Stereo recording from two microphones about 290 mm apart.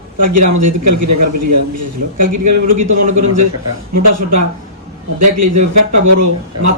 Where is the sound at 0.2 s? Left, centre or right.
Right.